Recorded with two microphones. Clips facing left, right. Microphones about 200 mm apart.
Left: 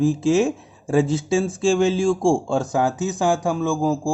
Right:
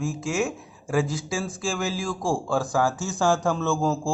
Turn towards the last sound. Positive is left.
turn(degrees=10)  # may be behind; listen again after turning